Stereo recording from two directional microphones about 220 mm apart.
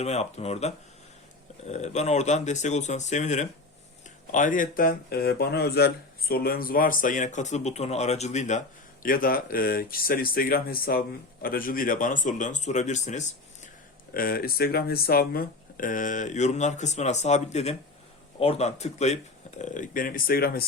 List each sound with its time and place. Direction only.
0.0 s speech: 30° left (ahead or behind)
1.7 s speech: 30° left (ahead or behind)